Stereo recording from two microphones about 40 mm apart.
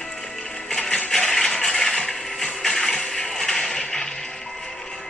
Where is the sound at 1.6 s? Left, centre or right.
Centre.